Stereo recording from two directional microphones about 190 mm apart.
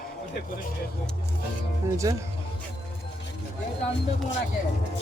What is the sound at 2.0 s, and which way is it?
Speech, 15° right (ahead or behind).